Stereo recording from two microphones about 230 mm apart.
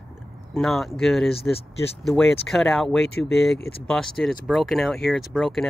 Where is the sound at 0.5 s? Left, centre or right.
Centre.